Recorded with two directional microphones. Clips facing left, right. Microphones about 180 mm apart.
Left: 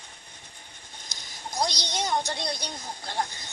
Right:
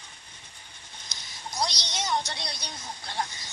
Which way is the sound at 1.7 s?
55° left (ahead or behind).